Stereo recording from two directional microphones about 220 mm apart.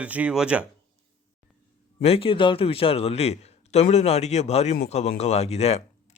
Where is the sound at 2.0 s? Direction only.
25° left (ahead or behind).